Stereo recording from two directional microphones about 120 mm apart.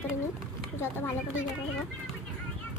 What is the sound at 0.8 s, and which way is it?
Speech, 20° left (ahead or behind).